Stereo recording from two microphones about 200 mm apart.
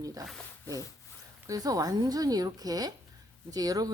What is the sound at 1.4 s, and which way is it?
A woman's voice, 15° right (ahead or behind).